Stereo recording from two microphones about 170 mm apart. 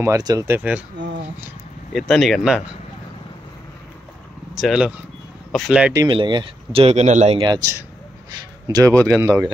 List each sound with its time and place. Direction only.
0.0 s speech: 20° right (ahead or behind)
2.0 s speech: centre (ahead or behind)
4.6 s speech: centre (ahead or behind)
5.9 s speech: 30° right (ahead or behind)
7.3 s speech: 25° right (ahead or behind)